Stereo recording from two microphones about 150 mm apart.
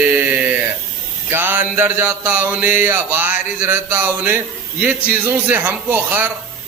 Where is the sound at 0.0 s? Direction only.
10° right (ahead or behind).